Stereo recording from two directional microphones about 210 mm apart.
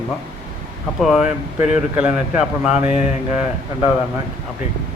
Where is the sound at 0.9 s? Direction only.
Centre (ahead or behind).